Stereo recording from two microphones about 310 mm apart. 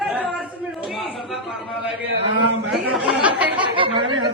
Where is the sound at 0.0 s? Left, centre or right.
Centre.